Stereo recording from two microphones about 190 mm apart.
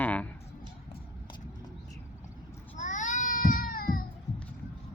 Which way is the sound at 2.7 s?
40° left (ahead or behind).